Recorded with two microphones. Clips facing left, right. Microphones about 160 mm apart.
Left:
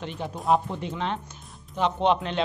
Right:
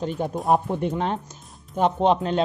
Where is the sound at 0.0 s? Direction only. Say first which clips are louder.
Right 5 dB; 45° right (ahead or behind).